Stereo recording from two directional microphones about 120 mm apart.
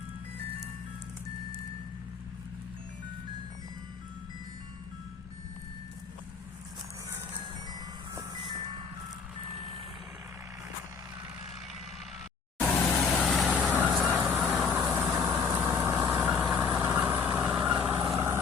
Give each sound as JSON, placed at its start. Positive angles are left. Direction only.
{"t": 7.7, "sound": "music", "side_deg": -35}
{"t": 12.5, "sound": "vehicle", "side_deg": 10}
{"t": 13.5, "sound": "vehicle", "side_deg": -10}
{"t": 16.0, "sound": "vehicle", "side_deg": -10}